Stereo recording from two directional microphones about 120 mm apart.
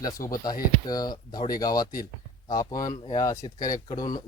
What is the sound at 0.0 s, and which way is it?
Speech, 30° left (ahead or behind).